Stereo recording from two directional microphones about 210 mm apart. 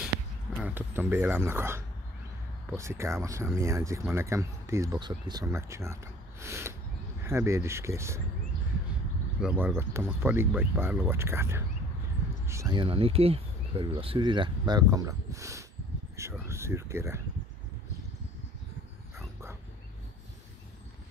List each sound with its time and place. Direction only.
0.6 s speech: 10° right (ahead or behind)
9.4 s speech: 5° right (ahead or behind)